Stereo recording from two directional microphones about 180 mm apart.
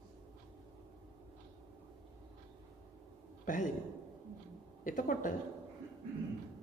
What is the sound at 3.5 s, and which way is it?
Speech, 45° left (ahead or behind).